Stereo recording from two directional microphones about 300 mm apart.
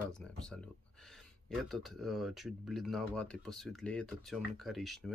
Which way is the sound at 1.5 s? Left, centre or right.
Centre.